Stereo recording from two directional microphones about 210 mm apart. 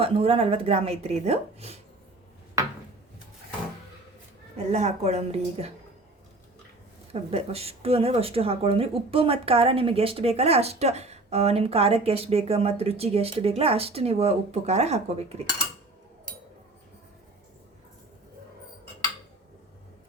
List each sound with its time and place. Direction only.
0.0 s speech: 25° right (ahead or behind)
4.5 s a woman's voice: 30° right (ahead or behind)
7.1 s speech: 30° right (ahead or behind)